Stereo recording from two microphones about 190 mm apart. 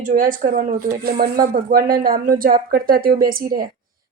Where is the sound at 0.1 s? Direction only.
45° right (ahead or behind).